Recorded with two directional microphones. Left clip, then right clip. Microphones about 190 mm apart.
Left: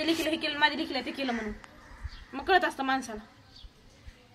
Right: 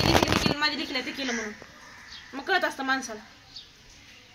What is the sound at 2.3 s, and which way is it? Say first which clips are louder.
Speech: left 1 dB; 10° left (ahead or behind).